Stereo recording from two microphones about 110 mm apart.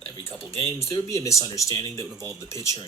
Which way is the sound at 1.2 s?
30° left (ahead or behind).